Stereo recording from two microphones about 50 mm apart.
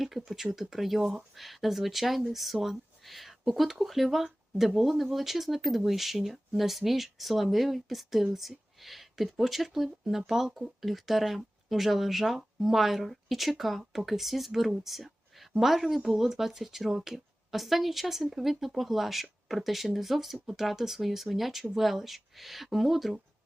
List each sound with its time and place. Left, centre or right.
0.1 s speech: centre
0.5 s speech: centre